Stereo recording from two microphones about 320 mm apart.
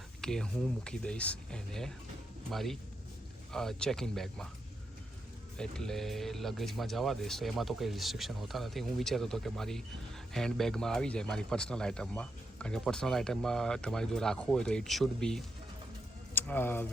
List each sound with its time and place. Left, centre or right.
0.2 s speech: centre
5.5 s speech: centre